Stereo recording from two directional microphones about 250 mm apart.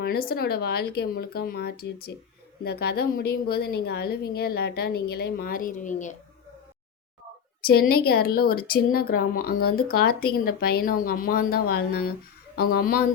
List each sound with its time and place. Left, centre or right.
0.0 s a woman's voice: left
7.6 s a woman's voice: left